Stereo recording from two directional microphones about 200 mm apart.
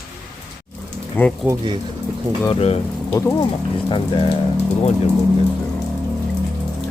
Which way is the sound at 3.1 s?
15° left (ahead or behind).